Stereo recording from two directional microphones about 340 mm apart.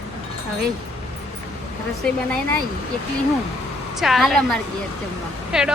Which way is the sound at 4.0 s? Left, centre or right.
Centre.